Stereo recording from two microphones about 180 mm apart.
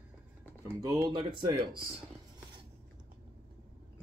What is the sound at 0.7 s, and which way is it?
Speech, 15° right (ahead or behind).